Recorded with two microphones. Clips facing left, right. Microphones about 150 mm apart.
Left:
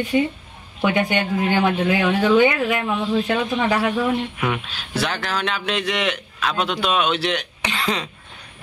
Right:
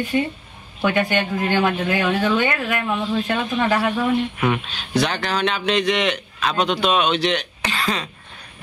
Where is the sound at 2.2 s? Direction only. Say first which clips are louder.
Left 4 dB; 10° left (ahead or behind).